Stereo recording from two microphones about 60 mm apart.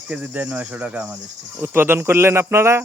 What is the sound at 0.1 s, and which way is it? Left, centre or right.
Speech, right.